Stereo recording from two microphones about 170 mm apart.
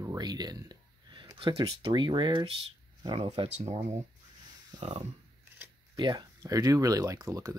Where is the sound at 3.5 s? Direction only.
40° right (ahead or behind).